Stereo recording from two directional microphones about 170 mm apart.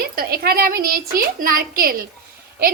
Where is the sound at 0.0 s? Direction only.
60° right (ahead or behind).